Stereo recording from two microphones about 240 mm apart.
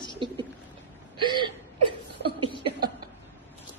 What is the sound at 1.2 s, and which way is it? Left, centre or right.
Whimper, centre.